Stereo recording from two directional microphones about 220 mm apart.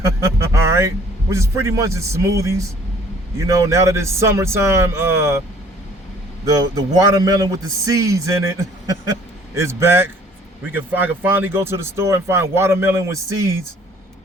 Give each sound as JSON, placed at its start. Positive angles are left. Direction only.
{"t": 0.0, "sound": "a man's voice", "side_deg": -15}
{"t": 6.4, "sound": "a man's voice", "side_deg": -15}